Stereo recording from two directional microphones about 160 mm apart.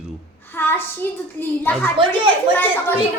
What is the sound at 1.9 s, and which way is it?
Speech, 30° right (ahead or behind).